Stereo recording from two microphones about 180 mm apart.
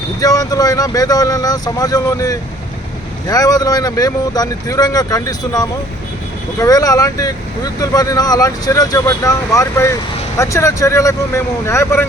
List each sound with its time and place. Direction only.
0.2 s speech: 20° left (ahead or behind)